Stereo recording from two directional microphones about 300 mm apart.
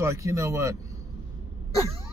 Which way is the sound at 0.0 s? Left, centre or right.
Centre.